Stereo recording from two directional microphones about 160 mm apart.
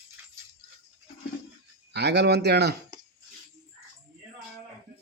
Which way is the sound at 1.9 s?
90° right.